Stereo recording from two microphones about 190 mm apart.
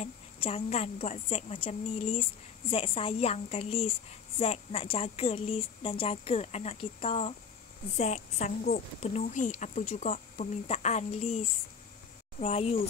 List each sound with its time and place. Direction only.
0.0 s a woman's voice: 35° left (ahead or behind)
8.0 s a woman's voice: 40° left (ahead or behind)